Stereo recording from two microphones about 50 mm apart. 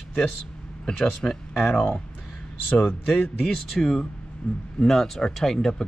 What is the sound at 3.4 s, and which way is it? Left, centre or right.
Speech, centre.